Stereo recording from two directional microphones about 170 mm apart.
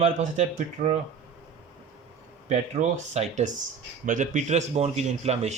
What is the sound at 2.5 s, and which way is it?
Speech, 40° right (ahead or behind).